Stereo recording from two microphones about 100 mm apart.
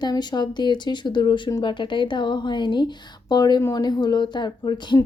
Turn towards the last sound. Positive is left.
turn(degrees=50)  # may be behind; listen again after turning